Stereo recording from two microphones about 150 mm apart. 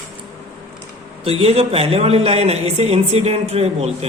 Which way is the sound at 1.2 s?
40° right (ahead or behind).